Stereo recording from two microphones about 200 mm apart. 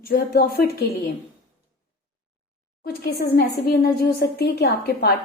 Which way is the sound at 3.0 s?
50° left (ahead or behind).